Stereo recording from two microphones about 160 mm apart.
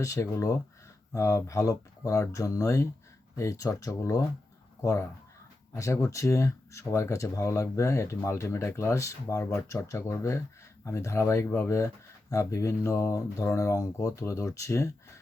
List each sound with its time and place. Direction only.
0.0 s speech: 20° left (ahead or behind)